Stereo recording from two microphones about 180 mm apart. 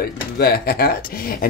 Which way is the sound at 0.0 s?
60° left (ahead or behind).